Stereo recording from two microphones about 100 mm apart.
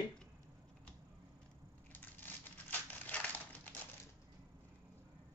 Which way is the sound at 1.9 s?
20° left (ahead or behind).